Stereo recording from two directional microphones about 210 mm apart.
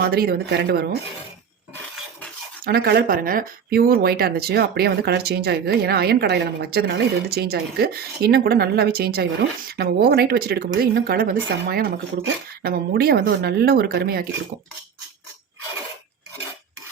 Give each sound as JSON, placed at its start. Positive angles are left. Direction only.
{"t": 0.0, "sound": "speech", "side_deg": -50}
{"t": 2.6, "sound": "speech", "side_deg": -45}